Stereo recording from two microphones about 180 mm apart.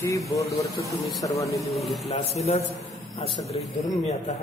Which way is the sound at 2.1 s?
35° left (ahead or behind).